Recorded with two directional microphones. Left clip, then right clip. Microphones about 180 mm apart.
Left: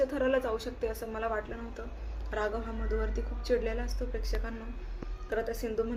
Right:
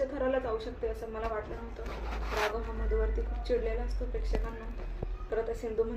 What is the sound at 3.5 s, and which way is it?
Speech, 15° left (ahead or behind).